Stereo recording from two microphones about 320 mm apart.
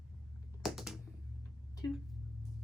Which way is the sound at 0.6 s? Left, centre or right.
Centre.